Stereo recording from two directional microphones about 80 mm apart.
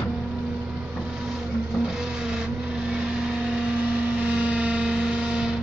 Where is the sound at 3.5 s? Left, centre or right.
Centre.